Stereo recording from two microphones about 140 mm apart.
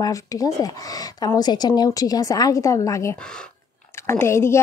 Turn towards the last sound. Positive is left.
turn(degrees=20)  # may be behind; listen again after turning